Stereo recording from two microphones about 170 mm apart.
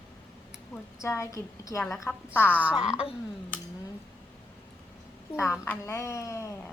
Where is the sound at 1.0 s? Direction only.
15° left (ahead or behind).